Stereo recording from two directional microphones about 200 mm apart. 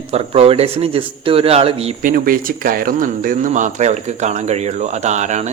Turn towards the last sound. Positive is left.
turn(degrees=-35)  # may be behind; listen again after turning